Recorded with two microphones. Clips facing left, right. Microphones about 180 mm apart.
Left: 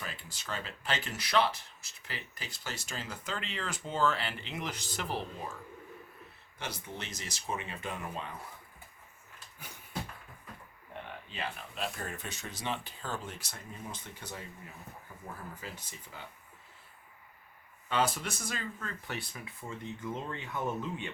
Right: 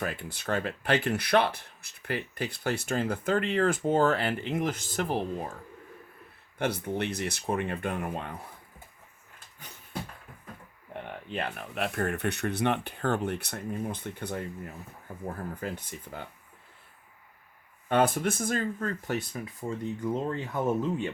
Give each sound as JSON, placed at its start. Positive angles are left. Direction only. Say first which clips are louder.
{"t": 0.0, "sound": "speech", "louder": "right 10 dB", "side_deg": -60}
{"t": 6.6, "sound": "speech", "louder": "right 12 dB", "side_deg": -60}
{"t": 9.6, "sound": "a sound", "louder": "right 1 dB", "side_deg": 10}
{"t": 11.3, "sound": "speech", "louder": "right 7 dB", "side_deg": -60}
{"t": 17.8, "sound": "speech", "louder": "right 7 dB", "side_deg": -55}